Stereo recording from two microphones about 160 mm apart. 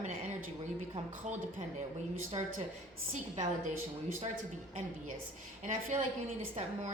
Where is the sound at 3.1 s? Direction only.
45° right (ahead or behind).